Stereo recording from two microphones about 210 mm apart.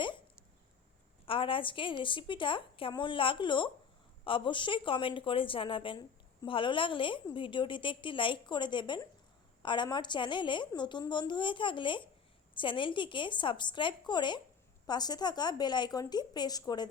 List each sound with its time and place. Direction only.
0.0 s hiccup: 20° left (ahead or behind)
1.2 s speech: 25° left (ahead or behind)